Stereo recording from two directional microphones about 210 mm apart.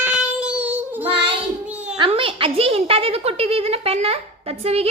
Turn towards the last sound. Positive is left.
turn(degrees=-30)  # may be behind; listen again after turning